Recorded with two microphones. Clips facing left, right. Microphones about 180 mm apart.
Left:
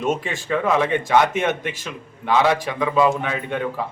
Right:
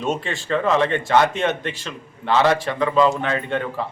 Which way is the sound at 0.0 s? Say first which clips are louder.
Left 1 dB; 15° left (ahead or behind).